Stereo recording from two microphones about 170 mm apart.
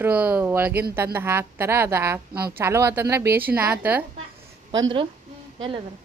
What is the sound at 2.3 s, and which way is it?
Speech, 65° right (ahead or behind).